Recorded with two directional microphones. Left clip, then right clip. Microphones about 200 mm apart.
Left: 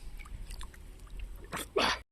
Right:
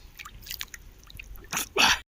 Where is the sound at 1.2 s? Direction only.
45° right (ahead or behind).